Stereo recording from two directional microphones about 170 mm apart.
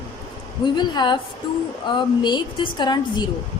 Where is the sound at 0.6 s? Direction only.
25° left (ahead or behind).